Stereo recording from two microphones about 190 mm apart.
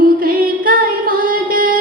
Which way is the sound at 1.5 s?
50° right (ahead or behind).